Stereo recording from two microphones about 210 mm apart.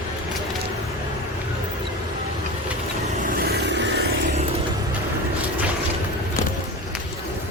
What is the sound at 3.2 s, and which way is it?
Vehicle, 45° right (ahead or behind).